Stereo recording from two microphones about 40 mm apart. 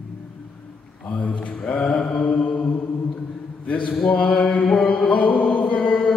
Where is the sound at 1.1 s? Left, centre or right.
Left.